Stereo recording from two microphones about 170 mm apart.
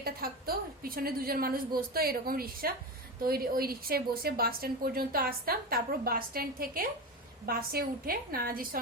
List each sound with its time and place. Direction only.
0.0 s a woman's voice: 60° right (ahead or behind)